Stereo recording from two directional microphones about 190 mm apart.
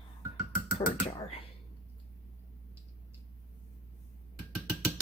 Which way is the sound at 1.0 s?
30° left (ahead or behind).